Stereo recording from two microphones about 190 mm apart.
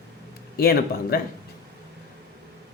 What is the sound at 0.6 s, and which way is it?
Speech, 55° left (ahead or behind).